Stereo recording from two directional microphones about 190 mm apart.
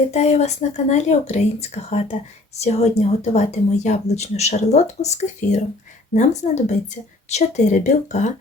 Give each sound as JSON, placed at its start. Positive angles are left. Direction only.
{"t": 0.1, "sound": "speech", "side_deg": 35}